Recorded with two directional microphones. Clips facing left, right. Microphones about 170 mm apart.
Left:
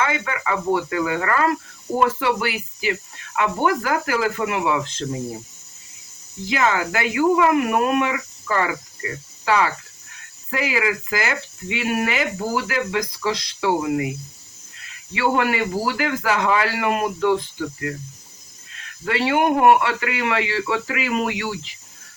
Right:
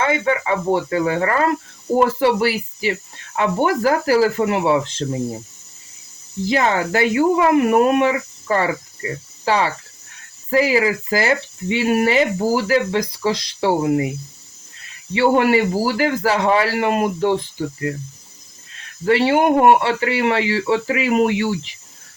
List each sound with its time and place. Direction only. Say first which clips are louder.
0.0 s speech: right 5 dB; 30° right (ahead or behind)
6.4 s speech: right 3 dB; 35° right (ahead or behind)
15.1 s speech: right 6 dB; 30° right (ahead or behind)
19.0 s speech: right 4 dB; 30° right (ahead or behind)